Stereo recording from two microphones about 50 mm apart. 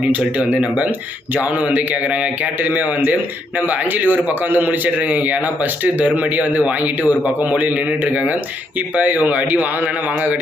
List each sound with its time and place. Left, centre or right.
0.1 s a man's voice: right